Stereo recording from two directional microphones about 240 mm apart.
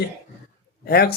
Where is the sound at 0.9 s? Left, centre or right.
Left.